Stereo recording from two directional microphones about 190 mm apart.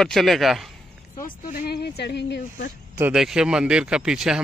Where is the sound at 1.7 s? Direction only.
60° left (ahead or behind).